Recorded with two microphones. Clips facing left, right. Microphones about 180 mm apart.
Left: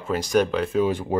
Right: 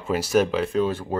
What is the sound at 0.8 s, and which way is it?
Speech, 15° left (ahead or behind).